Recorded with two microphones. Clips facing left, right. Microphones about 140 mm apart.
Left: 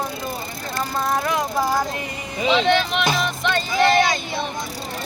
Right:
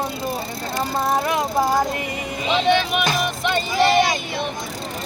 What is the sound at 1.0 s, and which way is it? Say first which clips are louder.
Speech: right 1 dB; 25° right (ahead or behind).